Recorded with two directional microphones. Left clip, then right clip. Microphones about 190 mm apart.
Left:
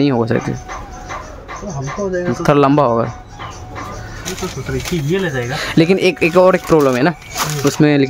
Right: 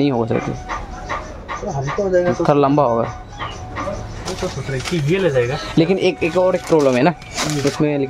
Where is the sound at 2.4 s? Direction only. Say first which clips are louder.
Left 7 dB; 20° left (ahead or behind).